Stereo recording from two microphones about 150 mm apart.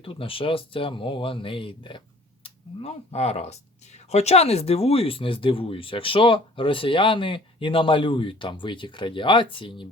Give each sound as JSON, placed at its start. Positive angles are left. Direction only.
{"t": 0.0, "sound": "speech", "side_deg": 35}